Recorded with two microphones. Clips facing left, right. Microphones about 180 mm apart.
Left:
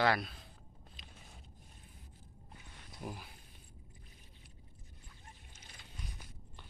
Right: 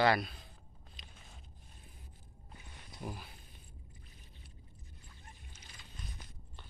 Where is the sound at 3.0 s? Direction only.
5° left (ahead or behind).